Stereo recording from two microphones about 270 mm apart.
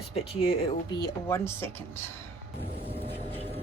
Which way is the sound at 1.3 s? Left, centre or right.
Centre.